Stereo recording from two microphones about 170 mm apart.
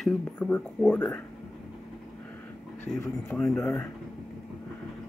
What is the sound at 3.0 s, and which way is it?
Speech, centre (ahead or behind).